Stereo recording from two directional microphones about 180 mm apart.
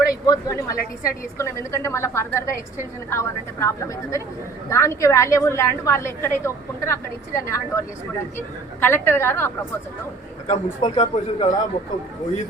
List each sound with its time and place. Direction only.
0.3 s a woman's voice: 20° left (ahead or behind)
10.4 s a man's voice: 30° left (ahead or behind)